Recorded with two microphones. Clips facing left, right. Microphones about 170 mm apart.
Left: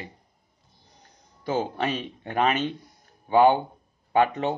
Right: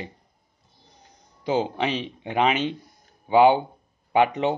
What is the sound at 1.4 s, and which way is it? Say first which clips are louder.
A man's voice: right 2 dB; 20° right (ahead or behind).